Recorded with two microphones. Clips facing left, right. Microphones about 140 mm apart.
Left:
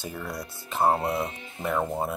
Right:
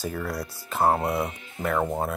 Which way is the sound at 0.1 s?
20° left (ahead or behind).